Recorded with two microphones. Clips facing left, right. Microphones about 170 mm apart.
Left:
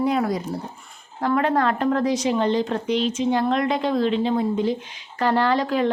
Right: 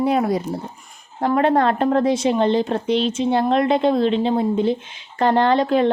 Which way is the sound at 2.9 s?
15° left (ahead or behind).